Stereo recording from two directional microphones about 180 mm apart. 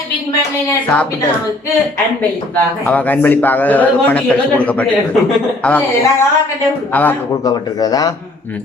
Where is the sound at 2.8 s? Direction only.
10° left (ahead or behind).